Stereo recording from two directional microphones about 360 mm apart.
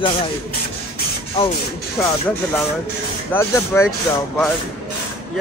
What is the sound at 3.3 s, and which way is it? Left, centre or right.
Speech, centre.